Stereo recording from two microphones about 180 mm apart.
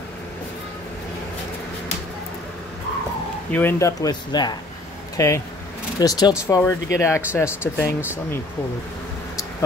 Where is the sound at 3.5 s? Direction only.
10° left (ahead or behind).